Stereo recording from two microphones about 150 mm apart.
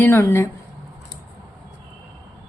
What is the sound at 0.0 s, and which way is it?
Speech, 15° left (ahead or behind).